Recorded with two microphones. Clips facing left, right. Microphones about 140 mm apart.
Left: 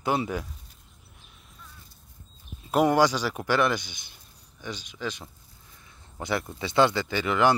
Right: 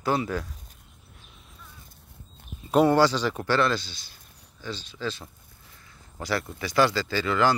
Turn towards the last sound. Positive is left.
turn(degrees=20)  # may be behind; listen again after turning